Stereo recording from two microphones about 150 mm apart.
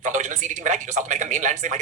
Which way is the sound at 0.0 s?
55° right (ahead or behind).